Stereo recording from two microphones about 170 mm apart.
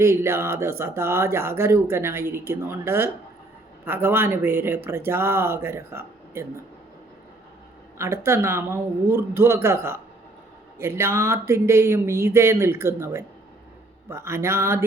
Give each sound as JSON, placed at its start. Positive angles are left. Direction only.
{"t": 0.0, "sound": "speech", "side_deg": -15}
{"t": 7.9, "sound": "speech", "side_deg": -15}